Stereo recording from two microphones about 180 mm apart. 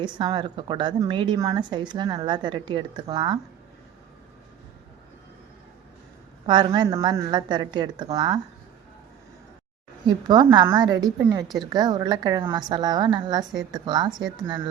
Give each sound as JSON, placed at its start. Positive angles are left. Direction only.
{"t": 0.0, "sound": "a woman's voice", "side_deg": -25}
{"t": 6.4, "sound": "a woman's voice", "side_deg": -25}
{"t": 10.2, "sound": "a woman's voice", "side_deg": -25}